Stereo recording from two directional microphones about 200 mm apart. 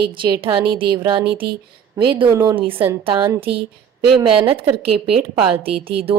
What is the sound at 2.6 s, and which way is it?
Speech, 25° right (ahead or behind).